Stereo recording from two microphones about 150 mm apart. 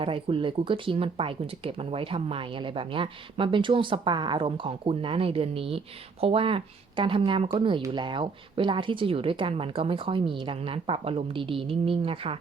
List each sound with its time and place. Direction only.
0.0 s speech: 35° right (ahead or behind)